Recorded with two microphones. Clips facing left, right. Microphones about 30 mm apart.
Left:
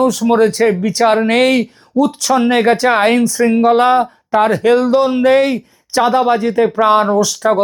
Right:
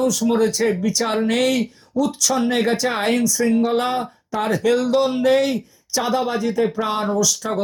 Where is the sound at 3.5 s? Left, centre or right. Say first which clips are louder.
Left 9 dB; left.